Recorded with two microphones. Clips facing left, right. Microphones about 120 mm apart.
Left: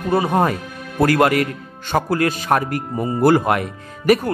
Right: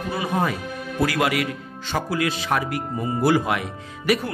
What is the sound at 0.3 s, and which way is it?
Speech, 55° left (ahead or behind).